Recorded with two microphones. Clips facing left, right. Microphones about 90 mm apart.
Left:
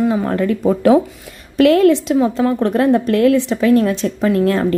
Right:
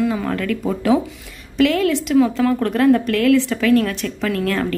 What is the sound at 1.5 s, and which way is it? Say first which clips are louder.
Speech: left 6 dB; 45° left (ahead or behind).